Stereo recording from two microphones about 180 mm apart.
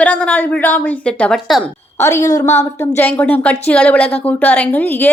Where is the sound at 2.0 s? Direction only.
15° left (ahead or behind).